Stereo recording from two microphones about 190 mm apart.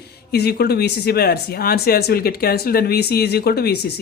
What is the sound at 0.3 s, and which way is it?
Speech, 55° left (ahead or behind).